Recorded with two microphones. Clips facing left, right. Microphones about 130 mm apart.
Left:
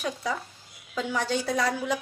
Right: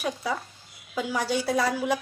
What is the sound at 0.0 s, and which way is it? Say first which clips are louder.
A woman's voice: right 1 dB; 10° right (ahead or behind).